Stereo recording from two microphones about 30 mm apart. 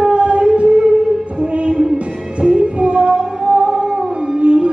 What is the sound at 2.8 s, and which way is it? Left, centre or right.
Music, right.